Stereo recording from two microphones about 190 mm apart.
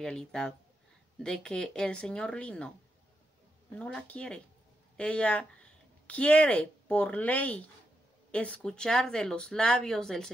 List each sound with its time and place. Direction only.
0.0 s speech: centre (ahead or behind)
3.7 s speech: 5° left (ahead or behind)